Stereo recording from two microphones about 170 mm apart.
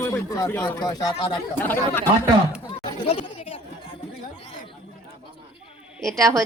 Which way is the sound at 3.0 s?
30° left (ahead or behind).